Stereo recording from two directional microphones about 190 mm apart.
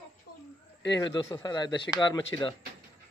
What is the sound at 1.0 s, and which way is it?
Speech, 20° left (ahead or behind).